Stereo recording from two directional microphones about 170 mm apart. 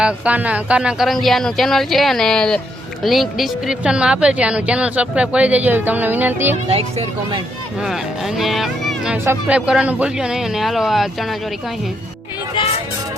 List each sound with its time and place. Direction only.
0.0 s speech: 10° right (ahead or behind)
6.7 s speech: 35° right (ahead or behind)
7.8 s speech: centre (ahead or behind)
9.1 s speech: 10° right (ahead or behind)